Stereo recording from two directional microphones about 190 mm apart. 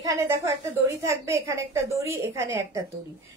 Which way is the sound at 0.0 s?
20° right (ahead or behind).